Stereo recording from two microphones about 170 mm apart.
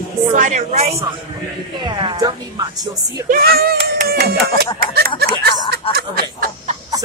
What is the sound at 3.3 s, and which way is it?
Speech, 60° right (ahead or behind).